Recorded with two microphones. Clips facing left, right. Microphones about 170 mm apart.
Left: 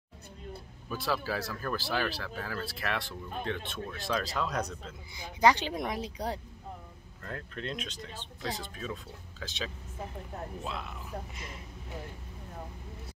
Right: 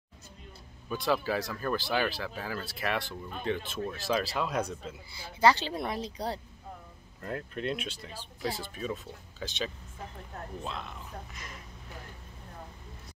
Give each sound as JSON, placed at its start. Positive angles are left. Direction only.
{"t": 0.8, "sound": "speech", "side_deg": 0}
{"t": 5.1, "sound": "speech", "side_deg": 15}
{"t": 7.2, "sound": "speech", "side_deg": -10}
{"t": 11.3, "sound": "speech", "side_deg": 25}